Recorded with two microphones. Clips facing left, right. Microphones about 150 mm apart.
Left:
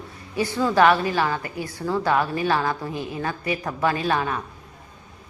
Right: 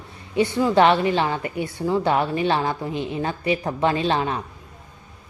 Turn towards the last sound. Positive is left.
turn(degrees=-25)  # may be behind; listen again after turning